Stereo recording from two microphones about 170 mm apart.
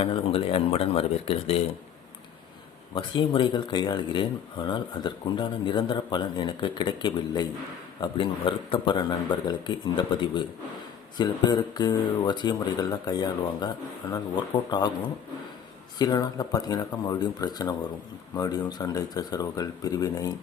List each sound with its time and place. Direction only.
0.0 s speech: 35° left (ahead or behind)
2.9 s speech: 30° left (ahead or behind)